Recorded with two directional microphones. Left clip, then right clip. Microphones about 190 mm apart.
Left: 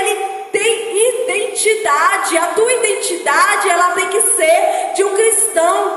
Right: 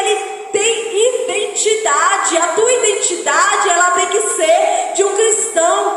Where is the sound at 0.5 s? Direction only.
45° left (ahead or behind).